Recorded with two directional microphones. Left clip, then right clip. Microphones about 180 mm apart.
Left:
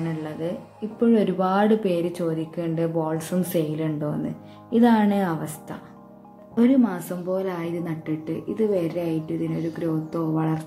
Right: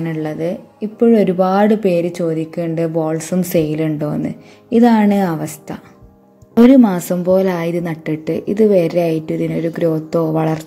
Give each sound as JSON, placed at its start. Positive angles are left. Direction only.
{"t": 0.0, "sound": "a woman's voice", "side_deg": -30}
{"t": 6.5, "sound": "a woman's voice", "side_deg": -45}